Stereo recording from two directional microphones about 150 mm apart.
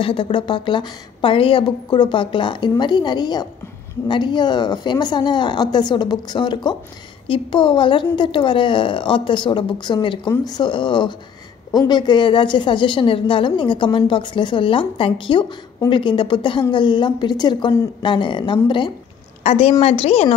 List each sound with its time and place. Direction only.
0.0 s a woman's voice: 35° left (ahead or behind)